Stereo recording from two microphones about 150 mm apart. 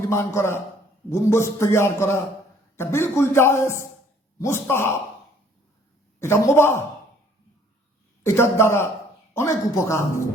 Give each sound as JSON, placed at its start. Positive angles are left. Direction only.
{"t": 0.1, "sound": "a man's voice", "side_deg": 20}
{"t": 6.1, "sound": "a man's voice", "side_deg": 15}
{"t": 8.2, "sound": "a man's voice", "side_deg": 15}